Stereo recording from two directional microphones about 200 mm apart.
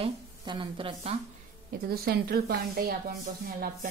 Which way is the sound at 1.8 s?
50° right (ahead or behind).